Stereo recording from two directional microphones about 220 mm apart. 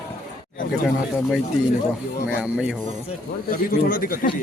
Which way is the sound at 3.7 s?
40° left (ahead or behind).